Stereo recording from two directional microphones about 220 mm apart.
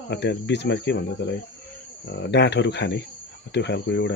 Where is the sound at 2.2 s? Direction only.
50° left (ahead or behind).